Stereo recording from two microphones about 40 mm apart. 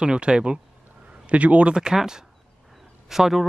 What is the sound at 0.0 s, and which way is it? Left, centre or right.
Speech, right.